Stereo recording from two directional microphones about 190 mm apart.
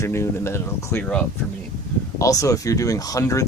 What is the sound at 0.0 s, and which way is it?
Speech, 15° left (ahead or behind).